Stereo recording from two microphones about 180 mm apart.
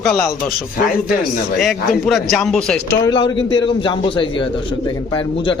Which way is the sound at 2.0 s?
Centre (ahead or behind).